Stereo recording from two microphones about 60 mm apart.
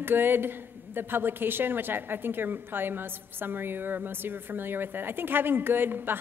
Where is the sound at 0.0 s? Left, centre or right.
Right.